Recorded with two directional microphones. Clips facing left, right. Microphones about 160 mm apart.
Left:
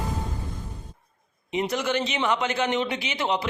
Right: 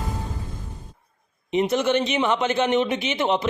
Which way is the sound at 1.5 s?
20° right (ahead or behind).